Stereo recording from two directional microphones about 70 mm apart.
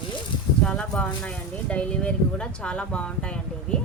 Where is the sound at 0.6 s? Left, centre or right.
Centre.